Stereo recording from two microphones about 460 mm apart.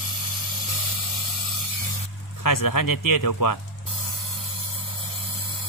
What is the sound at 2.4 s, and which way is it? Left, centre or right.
Speech, left.